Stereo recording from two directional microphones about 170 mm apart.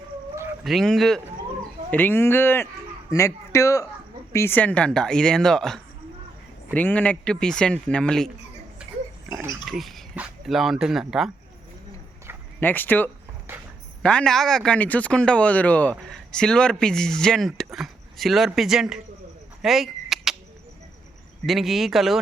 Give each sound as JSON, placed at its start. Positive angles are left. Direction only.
{"t": 0.6, "sound": "speech", "side_deg": 0}
{"t": 8.8, "sound": "pig", "side_deg": -5}
{"t": 9.3, "sound": "pig", "side_deg": -20}
{"t": 9.6, "sound": "speech", "side_deg": 0}
{"t": 12.5, "sound": "speech", "side_deg": 10}
{"t": 13.5, "sound": "a sound", "side_deg": -15}
{"t": 14.0, "sound": "speech", "side_deg": 5}
{"t": 19.6, "sound": "a sound", "side_deg": 0}
{"t": 21.4, "sound": "speech", "side_deg": 0}